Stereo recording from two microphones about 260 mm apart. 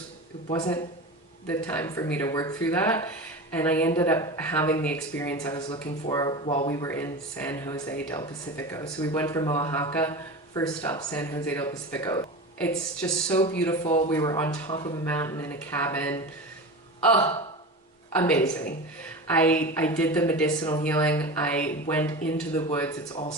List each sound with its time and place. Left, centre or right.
0.4 s speech: left
1.5 s speech: centre
13.8 s speech: left
14.1 s speech: centre